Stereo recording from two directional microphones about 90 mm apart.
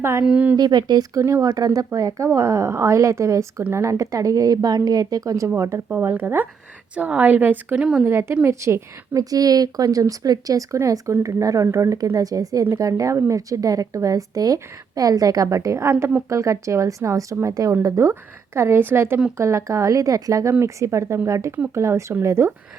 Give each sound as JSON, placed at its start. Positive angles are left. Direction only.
{"t": 0.0, "sound": "a woman's voice", "side_deg": -30}
{"t": 0.3, "sound": "a woman's voice", "side_deg": -15}
{"t": 0.5, "sound": "speech", "side_deg": -50}
{"t": 1.2, "sound": "a woman's voice", "side_deg": -40}
{"t": 5.5, "sound": "a woman's voice", "side_deg": -35}
{"t": 7.8, "sound": "a woman's voice", "side_deg": -10}
{"t": 8.0, "sound": "a woman's voice", "side_deg": -30}
{"t": 16.3, "sound": "a woman's voice", "side_deg": -35}